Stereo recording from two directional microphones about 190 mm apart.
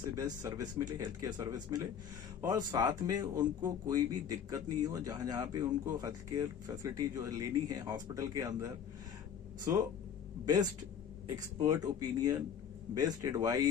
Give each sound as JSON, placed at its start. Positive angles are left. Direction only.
{"t": 0.2, "sound": "speech", "side_deg": -20}
{"t": 10.4, "sound": "speech", "side_deg": -20}